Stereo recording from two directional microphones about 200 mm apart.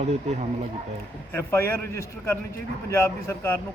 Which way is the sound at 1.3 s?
10° left (ahead or behind).